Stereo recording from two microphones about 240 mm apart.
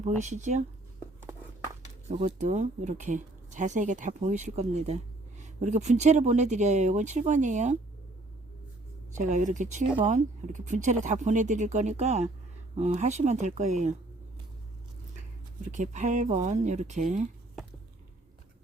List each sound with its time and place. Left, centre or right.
0.2 s speech: right
2.0 s speech: right
9.1 s speech: right
15.6 s speech: right